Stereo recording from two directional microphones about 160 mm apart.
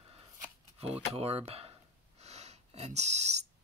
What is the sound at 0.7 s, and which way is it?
Speech, 40° right (ahead or behind).